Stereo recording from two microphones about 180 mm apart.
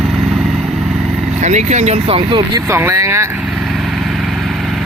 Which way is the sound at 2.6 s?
15° right (ahead or behind).